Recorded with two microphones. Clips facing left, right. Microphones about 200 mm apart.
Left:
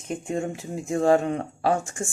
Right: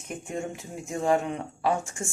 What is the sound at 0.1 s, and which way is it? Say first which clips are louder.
Speech: left 5 dB; 35° left (ahead or behind).